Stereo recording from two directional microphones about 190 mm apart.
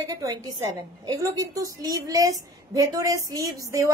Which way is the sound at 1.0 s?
15° right (ahead or behind).